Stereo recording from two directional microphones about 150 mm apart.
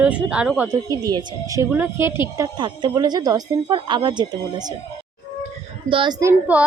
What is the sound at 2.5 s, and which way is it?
Speech, 30° right (ahead or behind).